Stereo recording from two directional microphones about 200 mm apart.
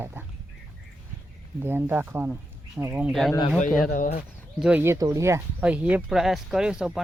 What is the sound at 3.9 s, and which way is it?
Speech, 45° left (ahead or behind).